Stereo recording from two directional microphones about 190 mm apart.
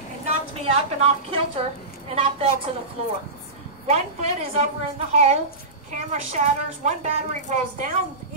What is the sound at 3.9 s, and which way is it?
A woman's voice, 35° right (ahead or behind).